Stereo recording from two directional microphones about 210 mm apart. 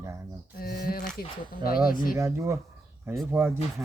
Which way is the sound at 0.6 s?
45° left (ahead or behind).